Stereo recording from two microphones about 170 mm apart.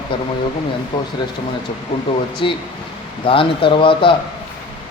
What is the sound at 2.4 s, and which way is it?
A man's voice, 30° left (ahead or behind).